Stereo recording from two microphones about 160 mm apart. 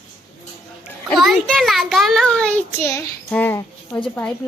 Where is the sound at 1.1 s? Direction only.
Centre (ahead or behind).